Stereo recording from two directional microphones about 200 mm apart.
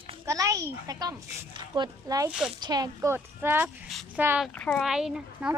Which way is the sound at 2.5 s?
20° right (ahead or behind).